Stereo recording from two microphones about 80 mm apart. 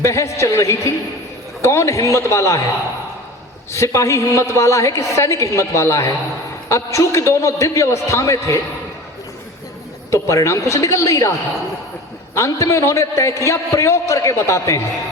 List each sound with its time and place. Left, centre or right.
0.0 s a woman's voice: left
3.7 s a woman's voice: left
10.1 s a woman's voice: left